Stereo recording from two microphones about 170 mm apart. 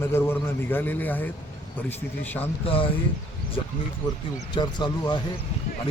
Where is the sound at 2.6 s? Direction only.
35° left (ahead or behind).